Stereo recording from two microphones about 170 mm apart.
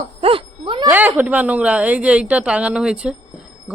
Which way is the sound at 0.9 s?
10° right (ahead or behind).